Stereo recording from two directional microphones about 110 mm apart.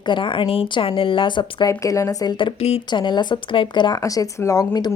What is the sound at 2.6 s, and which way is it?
Speech, 65° left (ahead or behind).